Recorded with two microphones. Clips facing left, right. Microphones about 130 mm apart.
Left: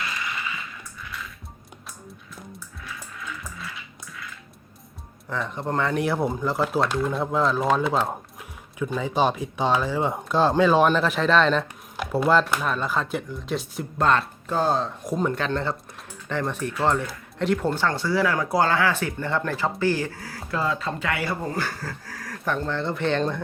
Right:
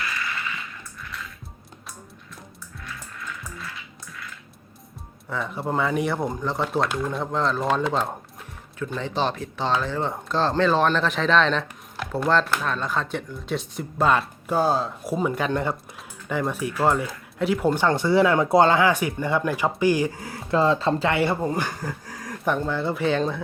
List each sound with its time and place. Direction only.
2.8 s music: centre (ahead or behind)
5.3 s speech: 5° right (ahead or behind)
17.7 s speech: 20° right (ahead or behind)